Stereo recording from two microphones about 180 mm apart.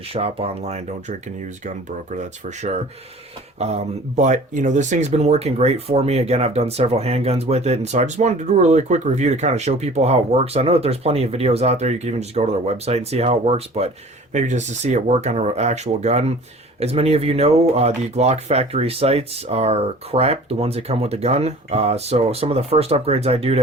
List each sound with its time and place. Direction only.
0.1 s speech: 35° right (ahead or behind)
2.6 s speech: 35° right (ahead or behind)